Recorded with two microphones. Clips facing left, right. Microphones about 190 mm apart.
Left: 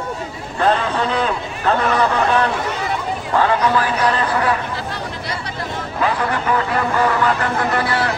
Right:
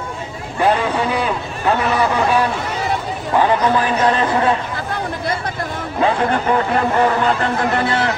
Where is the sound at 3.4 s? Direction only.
20° right (ahead or behind).